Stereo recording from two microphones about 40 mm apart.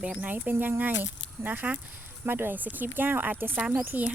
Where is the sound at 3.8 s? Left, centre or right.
Right.